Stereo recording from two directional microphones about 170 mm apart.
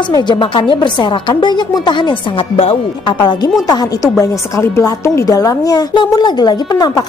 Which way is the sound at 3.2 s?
25° left (ahead or behind).